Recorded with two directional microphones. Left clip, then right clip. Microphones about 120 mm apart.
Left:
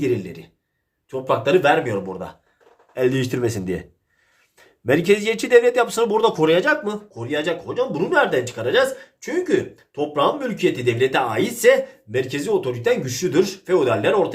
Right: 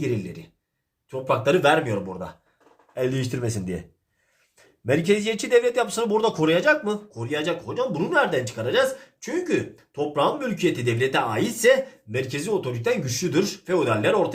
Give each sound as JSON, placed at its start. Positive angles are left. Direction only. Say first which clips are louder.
{"t": 0.0, "sound": "a man's voice", "louder": "left 5 dB", "side_deg": 20}
{"t": 1.5, "sound": "a man's voice", "louder": "left 2 dB", "side_deg": 5}
{"t": 1.8, "sound": "a man's voice", "louder": "left 3 dB", "side_deg": 15}
{"t": 2.9, "sound": "speech", "louder": "left 6 dB", "side_deg": 30}
{"t": 4.9, "sound": "a man's voice", "louder": "left 4 dB", "side_deg": 30}